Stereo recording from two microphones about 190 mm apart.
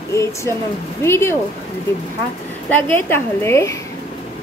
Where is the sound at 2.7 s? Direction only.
10° left (ahead or behind).